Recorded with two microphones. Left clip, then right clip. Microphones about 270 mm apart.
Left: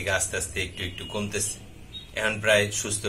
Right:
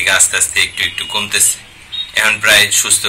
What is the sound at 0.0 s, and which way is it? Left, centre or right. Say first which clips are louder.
Speech: right 14 dB; centre.